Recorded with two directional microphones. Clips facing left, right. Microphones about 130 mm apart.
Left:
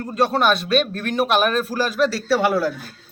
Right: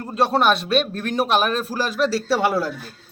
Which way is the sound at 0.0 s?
30° right (ahead or behind).